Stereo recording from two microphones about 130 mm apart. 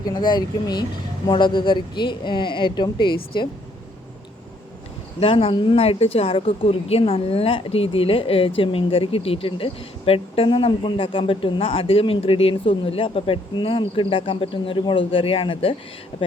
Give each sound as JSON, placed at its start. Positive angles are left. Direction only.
{"t": 0.0, "sound": "speech", "side_deg": 30}
{"t": 5.2, "sound": "speech", "side_deg": 45}